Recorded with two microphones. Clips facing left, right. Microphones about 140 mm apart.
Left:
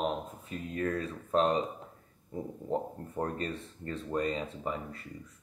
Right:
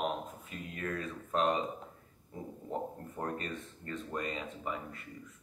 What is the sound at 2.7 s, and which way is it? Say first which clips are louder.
Speech: left 5 dB; 35° left (ahead or behind).